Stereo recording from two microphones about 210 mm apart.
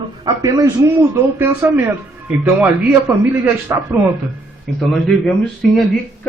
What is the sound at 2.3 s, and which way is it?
Speech, 5° right (ahead or behind).